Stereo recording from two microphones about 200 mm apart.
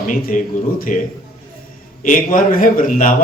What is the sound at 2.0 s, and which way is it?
A man's voice, 40° left (ahead or behind).